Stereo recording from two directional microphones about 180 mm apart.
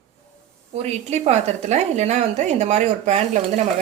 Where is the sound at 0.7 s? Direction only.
35° right (ahead or behind).